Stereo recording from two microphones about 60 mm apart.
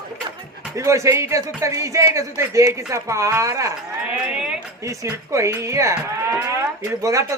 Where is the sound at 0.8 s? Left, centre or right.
Right.